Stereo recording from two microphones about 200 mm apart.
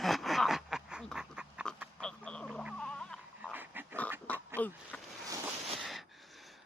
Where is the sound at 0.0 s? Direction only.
Centre (ahead or behind).